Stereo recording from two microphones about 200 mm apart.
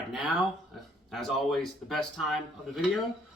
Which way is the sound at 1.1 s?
Centre (ahead or behind).